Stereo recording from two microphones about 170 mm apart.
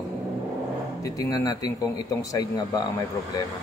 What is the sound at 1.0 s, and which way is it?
A man's voice, 20° left (ahead or behind).